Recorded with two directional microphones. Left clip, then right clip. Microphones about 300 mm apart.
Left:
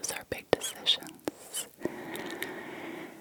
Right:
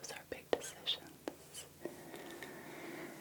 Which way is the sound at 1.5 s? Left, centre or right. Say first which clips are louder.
Left 11 dB; left.